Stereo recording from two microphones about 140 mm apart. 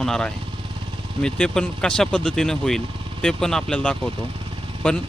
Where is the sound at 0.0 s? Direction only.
5° left (ahead or behind).